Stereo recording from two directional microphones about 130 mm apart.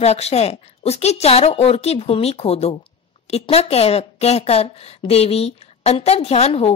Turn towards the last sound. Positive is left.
turn(degrees=50)  # may be behind; listen again after turning